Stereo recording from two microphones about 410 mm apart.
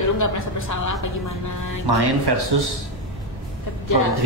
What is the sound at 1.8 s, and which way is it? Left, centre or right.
Speech, right.